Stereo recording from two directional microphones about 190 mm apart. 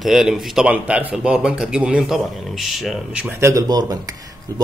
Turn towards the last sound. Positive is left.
turn(degrees=-20)  # may be behind; listen again after turning